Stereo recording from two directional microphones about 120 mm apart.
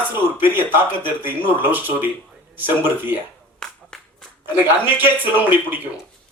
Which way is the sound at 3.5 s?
5° left (ahead or behind).